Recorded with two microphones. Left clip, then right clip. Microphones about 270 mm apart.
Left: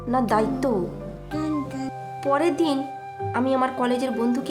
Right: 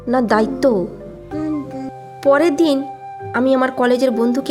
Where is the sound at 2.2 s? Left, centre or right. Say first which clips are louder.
Right 8 dB; right.